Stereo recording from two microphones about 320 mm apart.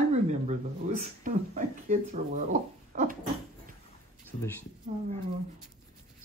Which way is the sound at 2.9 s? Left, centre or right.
Right.